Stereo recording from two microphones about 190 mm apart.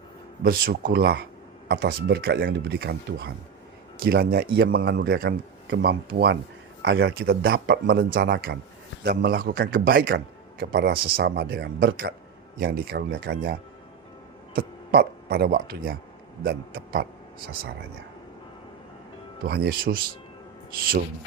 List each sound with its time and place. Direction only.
0.4 s speech: 50° right (ahead or behind); by 7.1 s 70° right (ahead or behind)
7.2 s speech: 55° right (ahead or behind)
14.9 s speech: 55° right (ahead or behind)
19.5 s speech: 55° right (ahead or behind)